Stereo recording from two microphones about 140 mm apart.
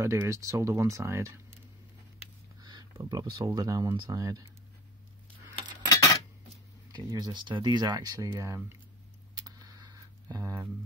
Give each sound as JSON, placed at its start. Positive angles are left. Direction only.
{"t": 0.0, "sound": "speech", "side_deg": -20}
{"t": 2.6, "sound": "speech", "side_deg": -30}
{"t": 5.9, "sound": "coin", "side_deg": 25}
{"t": 6.9, "sound": "speech", "side_deg": -30}
{"t": 9.6, "sound": "a sound", "side_deg": -25}